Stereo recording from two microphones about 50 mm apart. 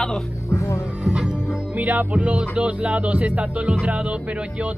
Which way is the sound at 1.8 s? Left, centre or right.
Right.